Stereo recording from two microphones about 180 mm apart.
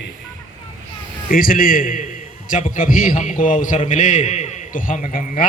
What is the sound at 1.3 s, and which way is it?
A man's voice, 50° left (ahead or behind).